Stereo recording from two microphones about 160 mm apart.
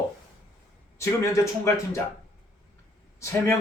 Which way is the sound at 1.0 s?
15° left (ahead or behind).